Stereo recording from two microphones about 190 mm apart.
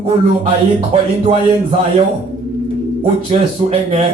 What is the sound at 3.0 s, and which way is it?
Speech, 30° right (ahead or behind).